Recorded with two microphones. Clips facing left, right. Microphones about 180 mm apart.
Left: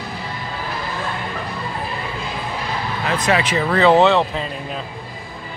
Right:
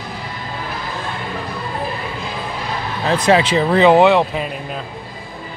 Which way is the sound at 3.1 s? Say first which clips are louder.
Right 5 dB; 30° right (ahead or behind).